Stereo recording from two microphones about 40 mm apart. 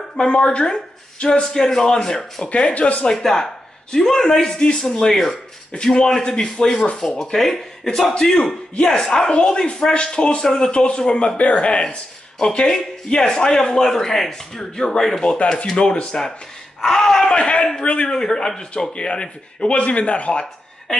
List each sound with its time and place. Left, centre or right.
0.2 s speech: left
2.4 s speech: left
3.1 s speech: centre
11.3 s speech: left
16.8 s speech: centre; by 20.4 s left